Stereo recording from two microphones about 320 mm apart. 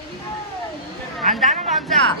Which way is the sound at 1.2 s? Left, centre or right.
Right.